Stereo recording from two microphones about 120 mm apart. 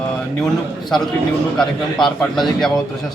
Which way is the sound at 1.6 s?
5° left (ahead or behind).